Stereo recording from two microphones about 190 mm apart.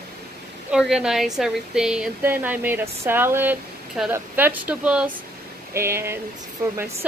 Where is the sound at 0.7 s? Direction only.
5° right (ahead or behind).